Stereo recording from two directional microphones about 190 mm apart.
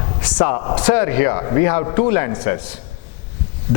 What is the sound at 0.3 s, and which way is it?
Speech, 20° left (ahead or behind).